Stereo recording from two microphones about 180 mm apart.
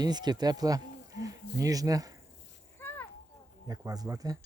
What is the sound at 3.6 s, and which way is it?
Speech, 20° right (ahead or behind).